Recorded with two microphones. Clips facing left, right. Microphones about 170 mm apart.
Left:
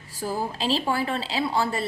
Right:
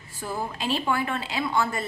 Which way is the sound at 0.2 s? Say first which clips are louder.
Left 3 dB; 35° left (ahead or behind).